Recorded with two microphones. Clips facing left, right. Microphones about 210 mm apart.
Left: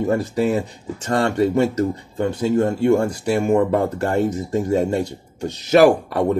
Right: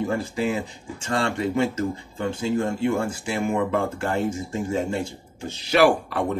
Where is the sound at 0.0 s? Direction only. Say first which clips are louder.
Left 5 dB; 40° left (ahead or behind).